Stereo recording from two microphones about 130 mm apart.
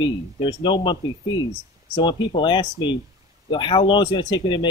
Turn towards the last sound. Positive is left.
turn(degrees=35)  # may be behind; listen again after turning